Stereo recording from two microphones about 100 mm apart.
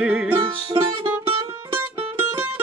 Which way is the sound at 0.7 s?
55° right (ahead or behind).